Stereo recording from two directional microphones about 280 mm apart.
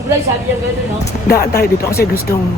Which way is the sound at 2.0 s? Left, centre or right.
Left.